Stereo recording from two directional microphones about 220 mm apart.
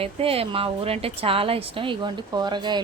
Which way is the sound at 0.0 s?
25° right (ahead or behind).